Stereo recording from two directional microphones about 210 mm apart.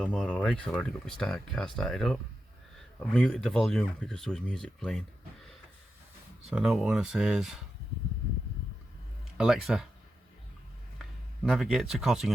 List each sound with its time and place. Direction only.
0.0 s speech: 5° left (ahead or behind)
6.5 s speech: centre (ahead or behind)
9.4 s speech: centre (ahead or behind)
11.4 s speech: centre (ahead or behind)